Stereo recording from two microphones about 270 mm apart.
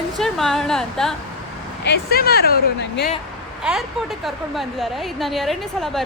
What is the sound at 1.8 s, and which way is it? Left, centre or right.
Speech, left.